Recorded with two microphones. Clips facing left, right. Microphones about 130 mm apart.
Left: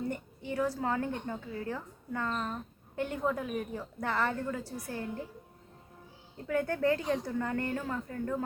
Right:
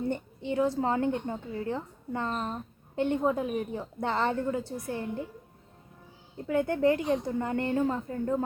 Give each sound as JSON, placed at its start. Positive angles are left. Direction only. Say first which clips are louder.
{"t": 0.1, "sound": "a woman's voice", "louder": "right 5 dB", "side_deg": -25}
{"t": 6.3, "sound": "a woman's voice", "louder": "right 4 dB", "side_deg": -20}